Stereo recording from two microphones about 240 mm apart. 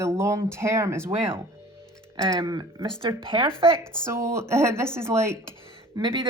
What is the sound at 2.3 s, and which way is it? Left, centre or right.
Speech, centre.